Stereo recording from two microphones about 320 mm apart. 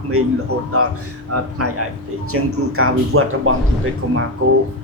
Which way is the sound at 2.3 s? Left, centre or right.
Right.